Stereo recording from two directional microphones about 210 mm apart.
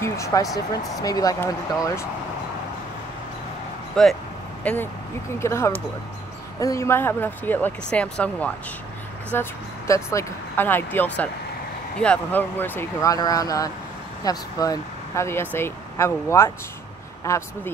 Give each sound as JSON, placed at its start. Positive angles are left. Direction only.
{"t": 0.0, "sound": "a sound", "side_deg": 15}
{"t": 1.0, "sound": "speech", "side_deg": 15}
{"t": 3.9, "sound": "speech", "side_deg": 0}